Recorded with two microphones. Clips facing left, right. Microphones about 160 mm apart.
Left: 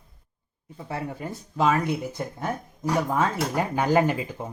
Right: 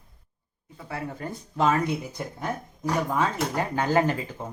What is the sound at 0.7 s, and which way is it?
Speech, 25° left (ahead or behind).